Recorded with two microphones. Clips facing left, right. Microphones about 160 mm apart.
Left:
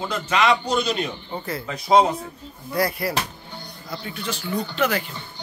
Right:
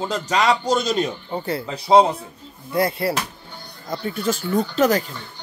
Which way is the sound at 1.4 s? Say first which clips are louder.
Right 2 dB; 30° right (ahead or behind).